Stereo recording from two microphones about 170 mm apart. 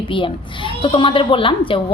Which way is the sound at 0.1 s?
30° left (ahead or behind).